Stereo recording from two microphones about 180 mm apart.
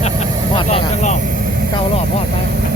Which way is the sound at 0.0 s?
35° left (ahead or behind).